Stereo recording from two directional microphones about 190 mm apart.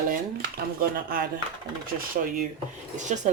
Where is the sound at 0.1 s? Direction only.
50° right (ahead or behind).